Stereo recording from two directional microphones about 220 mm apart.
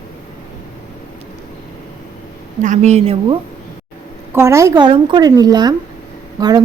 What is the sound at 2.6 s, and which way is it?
Speech, 35° right (ahead or behind).